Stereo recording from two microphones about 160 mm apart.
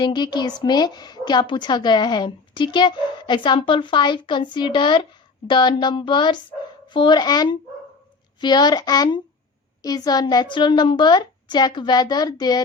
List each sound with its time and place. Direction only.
0.0 s a woman's voice: 30° left (ahead or behind)